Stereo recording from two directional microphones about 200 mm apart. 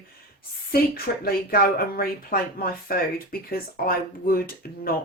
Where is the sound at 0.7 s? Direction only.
50° left (ahead or behind).